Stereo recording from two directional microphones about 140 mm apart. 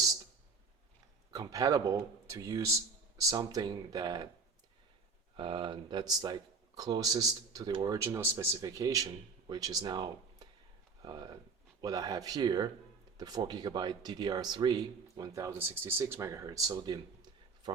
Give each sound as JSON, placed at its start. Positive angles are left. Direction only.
{"t": 1.3, "sound": "speech", "side_deg": -25}
{"t": 5.4, "sound": "speech", "side_deg": -40}